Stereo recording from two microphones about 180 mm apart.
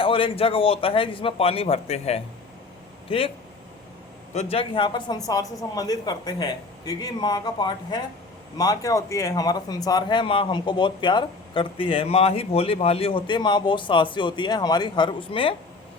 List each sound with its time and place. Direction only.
0.0 s a man's voice: 30° left (ahead or behind)
4.4 s speech: 30° left (ahead or behind)